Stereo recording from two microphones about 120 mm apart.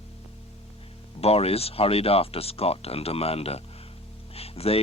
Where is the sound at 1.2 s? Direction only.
55° left (ahead or behind).